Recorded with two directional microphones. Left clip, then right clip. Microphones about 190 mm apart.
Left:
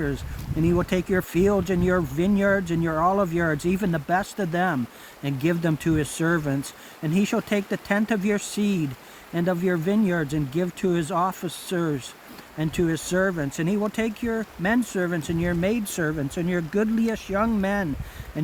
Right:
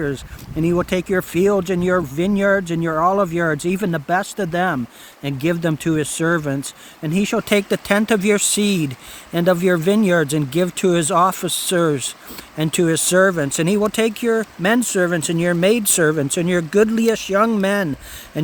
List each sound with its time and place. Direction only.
0.6 s speech: 55° right (ahead or behind)